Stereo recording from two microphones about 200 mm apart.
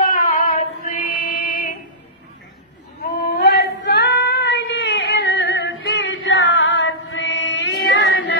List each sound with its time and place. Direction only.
0.1 s music: 45° left (ahead or behind)
3.2 s female singing: 55° left (ahead or behind)